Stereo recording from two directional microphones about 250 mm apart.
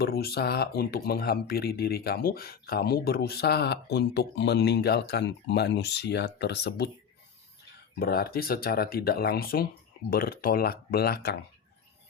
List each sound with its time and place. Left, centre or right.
0.0 s speech: left
7.9 s speech: left